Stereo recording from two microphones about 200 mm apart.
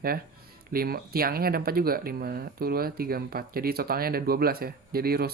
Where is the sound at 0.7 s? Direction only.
50° right (ahead or behind).